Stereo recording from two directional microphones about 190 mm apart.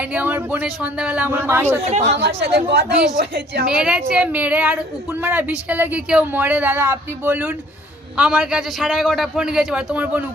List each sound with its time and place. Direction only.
0.1 s speech: 10° right (ahead or behind)
1.9 s speech: 35° right (ahead or behind)
2.1 s a woman's voice: 60° right (ahead or behind)
3.7 s a man's voice: 5° right (ahead or behind)